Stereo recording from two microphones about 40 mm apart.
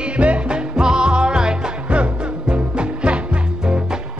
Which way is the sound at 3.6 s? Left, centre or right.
Centre.